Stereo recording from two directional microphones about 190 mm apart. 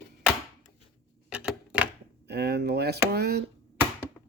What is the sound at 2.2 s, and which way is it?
Speech, 60° right (ahead or behind).